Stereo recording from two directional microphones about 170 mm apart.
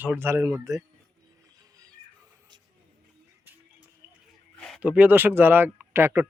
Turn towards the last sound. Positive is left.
turn(degrees=-15)  # may be behind; listen again after turning